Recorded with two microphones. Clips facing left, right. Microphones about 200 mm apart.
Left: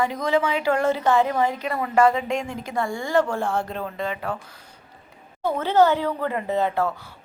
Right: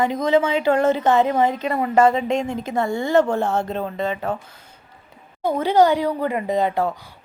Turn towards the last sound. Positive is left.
turn(degrees=-15)  # may be behind; listen again after turning